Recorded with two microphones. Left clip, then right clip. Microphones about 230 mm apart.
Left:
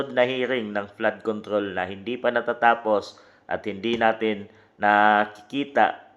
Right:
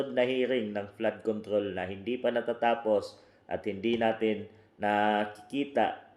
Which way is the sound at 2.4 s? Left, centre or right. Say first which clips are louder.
Left 10 dB; left.